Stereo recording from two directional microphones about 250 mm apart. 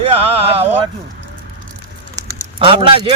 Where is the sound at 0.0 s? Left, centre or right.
Right.